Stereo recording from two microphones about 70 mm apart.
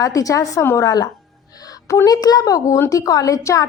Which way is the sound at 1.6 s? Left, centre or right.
Left.